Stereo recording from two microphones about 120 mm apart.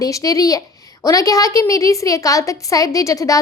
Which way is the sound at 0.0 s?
30° left (ahead or behind).